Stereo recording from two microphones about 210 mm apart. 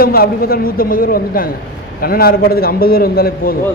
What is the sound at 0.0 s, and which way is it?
A man's voice, 45° left (ahead or behind).